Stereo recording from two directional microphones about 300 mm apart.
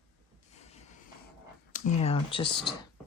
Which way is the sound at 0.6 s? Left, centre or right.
Left.